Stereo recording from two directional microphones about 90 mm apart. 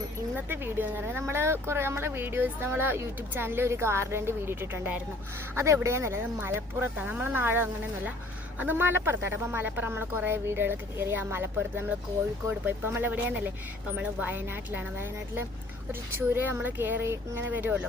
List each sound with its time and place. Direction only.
0.3 s speech: 25° right (ahead or behind)